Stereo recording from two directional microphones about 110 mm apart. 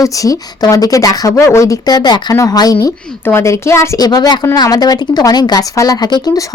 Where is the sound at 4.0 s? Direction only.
35° left (ahead or behind).